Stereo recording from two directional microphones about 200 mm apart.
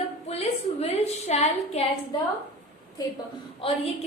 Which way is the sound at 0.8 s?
30° left (ahead or behind).